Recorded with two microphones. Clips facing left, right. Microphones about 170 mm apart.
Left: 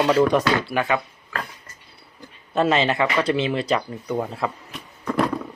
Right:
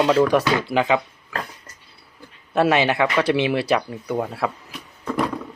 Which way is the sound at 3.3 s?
70° right (ahead or behind).